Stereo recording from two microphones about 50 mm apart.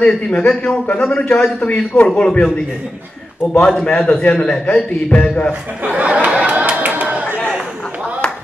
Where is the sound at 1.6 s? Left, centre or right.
Left.